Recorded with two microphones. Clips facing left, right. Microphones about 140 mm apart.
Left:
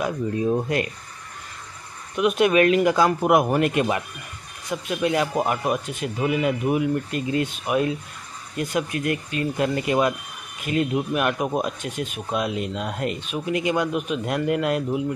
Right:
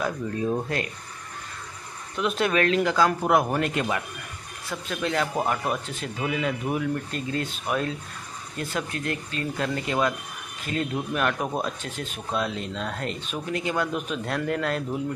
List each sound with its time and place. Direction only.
0.0 s speech: 15° left (ahead or behind)
2.1 s speech: 10° left (ahead or behind)